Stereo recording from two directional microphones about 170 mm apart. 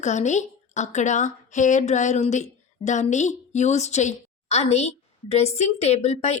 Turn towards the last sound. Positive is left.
turn(degrees=40)  # may be behind; listen again after turning